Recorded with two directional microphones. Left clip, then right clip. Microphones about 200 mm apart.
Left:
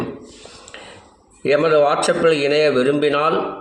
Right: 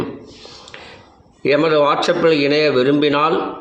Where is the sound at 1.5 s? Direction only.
15° right (ahead or behind).